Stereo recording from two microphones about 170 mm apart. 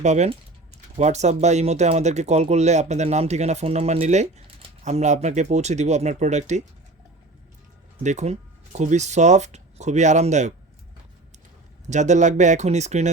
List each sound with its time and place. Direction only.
0.0 s speech: 40° right (ahead or behind)
8.0 s speech: 40° right (ahead or behind)
11.9 s speech: 45° right (ahead or behind)